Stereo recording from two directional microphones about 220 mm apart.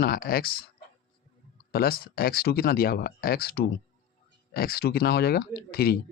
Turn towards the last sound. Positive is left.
turn(degrees=45)  # may be behind; listen again after turning